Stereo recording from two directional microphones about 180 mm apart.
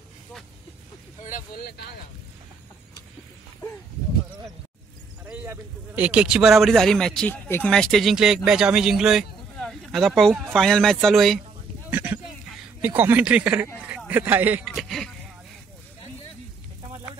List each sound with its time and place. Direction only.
1.2 s speech: 50° left (ahead or behind)
5.2 s speech: 10° right (ahead or behind)
14.8 s speech: centre (ahead or behind)